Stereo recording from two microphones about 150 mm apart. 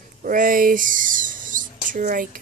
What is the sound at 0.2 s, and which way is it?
Speech, 65° right (ahead or behind).